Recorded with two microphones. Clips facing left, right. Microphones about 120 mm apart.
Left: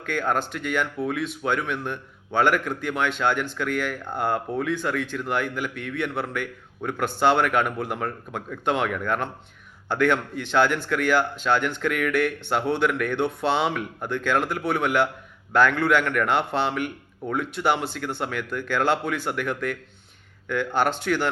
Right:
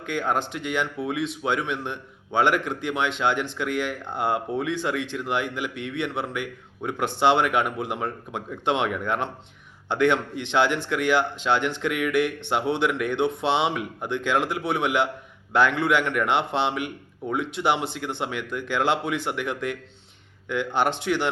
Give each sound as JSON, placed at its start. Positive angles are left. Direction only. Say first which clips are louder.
{"t": 0.0, "sound": "a man's voice", "louder": "even", "side_deg": -20}